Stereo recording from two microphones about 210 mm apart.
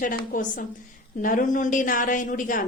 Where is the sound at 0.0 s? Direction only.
40° left (ahead or behind).